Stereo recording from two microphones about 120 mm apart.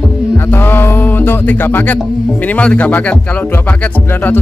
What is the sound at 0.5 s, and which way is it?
Music, 15° left (ahead or behind).